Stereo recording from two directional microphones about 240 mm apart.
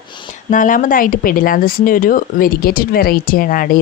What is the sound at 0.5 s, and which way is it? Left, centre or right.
Speech, left.